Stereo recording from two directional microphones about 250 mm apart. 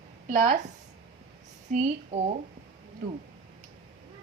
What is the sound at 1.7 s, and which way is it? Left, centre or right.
Speech, right.